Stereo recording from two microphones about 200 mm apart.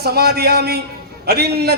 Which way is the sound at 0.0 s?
55° right (ahead or behind).